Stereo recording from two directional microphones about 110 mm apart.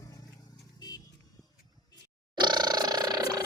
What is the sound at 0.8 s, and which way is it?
Vehicle, 35° left (ahead or behind).